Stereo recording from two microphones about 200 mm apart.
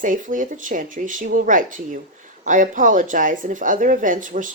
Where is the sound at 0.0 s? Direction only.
40° right (ahead or behind).